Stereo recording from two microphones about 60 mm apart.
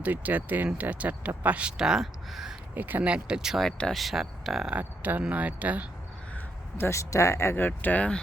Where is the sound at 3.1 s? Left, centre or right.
Centre.